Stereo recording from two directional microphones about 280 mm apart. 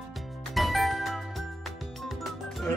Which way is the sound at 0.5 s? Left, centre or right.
Centre.